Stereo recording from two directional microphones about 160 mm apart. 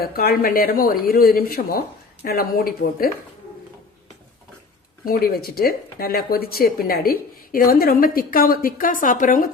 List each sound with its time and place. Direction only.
0.0 s speech: 70° left (ahead or behind)
5.0 s speech: 65° left (ahead or behind)